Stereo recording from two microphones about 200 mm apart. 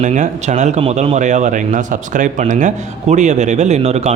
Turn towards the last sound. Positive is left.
turn(degrees=-30)  # may be behind; listen again after turning